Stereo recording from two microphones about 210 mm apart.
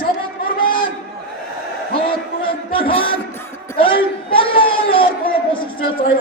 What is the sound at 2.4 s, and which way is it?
A man's voice, 25° left (ahead or behind).